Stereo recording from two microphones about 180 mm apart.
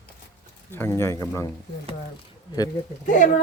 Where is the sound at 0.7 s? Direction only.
15° left (ahead or behind).